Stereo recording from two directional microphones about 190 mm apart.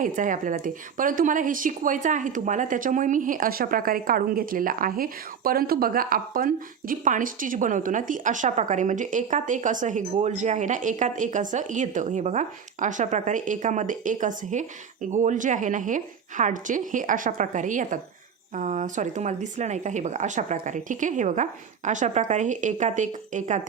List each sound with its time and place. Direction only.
0.0 s a woman's voice: 45° right (ahead or behind)